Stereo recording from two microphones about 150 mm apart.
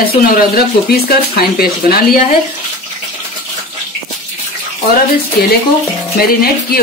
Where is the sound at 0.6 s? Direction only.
90° left.